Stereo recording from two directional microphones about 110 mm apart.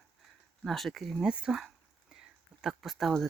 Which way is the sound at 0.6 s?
Centre (ahead or behind).